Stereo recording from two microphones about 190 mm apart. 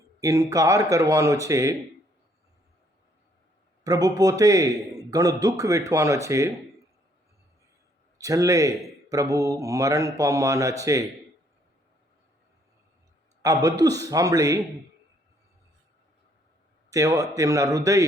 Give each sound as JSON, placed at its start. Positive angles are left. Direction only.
{"t": 0.2, "sound": "speech", "side_deg": -20}
{"t": 3.8, "sound": "a man's voice", "side_deg": -20}
{"t": 8.2, "sound": "speech", "side_deg": -15}
{"t": 13.4, "sound": "speech", "side_deg": -20}
{"t": 16.9, "sound": "speech", "side_deg": -15}